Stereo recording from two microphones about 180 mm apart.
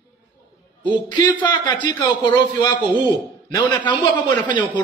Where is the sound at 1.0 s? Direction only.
25° left (ahead or behind).